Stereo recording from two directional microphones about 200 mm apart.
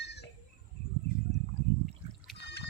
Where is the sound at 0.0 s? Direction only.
60° left (ahead or behind).